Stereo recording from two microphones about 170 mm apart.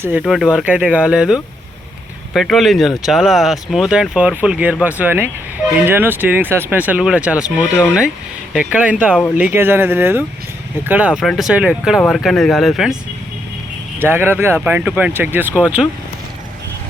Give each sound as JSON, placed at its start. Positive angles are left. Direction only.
{"t": 0.0, "sound": "speech", "side_deg": -10}
{"t": 8.5, "sound": "speech", "side_deg": -5}
{"t": 11.1, "sound": "speech", "side_deg": 0}
{"t": 14.0, "sound": "speech", "side_deg": -10}